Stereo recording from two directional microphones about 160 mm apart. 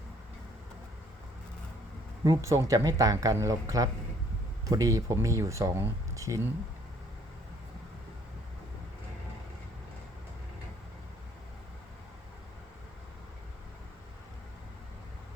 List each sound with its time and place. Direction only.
2.2 s speech: 20° right (ahead or behind)